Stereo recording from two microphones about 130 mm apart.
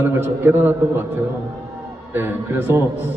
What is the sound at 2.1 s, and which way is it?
A man's voice, 15° right (ahead or behind).